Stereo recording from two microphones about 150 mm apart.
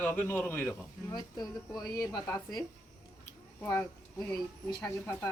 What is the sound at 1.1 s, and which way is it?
Speech, 25° left (ahead or behind).